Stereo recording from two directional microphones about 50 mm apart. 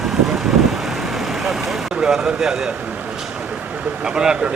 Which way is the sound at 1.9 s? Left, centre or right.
Centre.